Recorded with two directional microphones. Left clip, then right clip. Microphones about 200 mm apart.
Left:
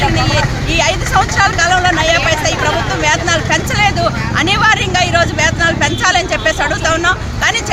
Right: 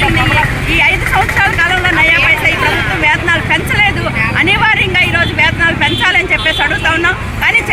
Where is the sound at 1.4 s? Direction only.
15° left (ahead or behind).